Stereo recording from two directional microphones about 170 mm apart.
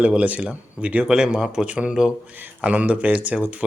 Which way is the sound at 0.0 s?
5° right (ahead or behind).